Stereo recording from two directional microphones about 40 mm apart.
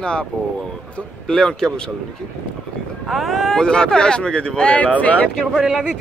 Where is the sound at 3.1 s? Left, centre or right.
Centre.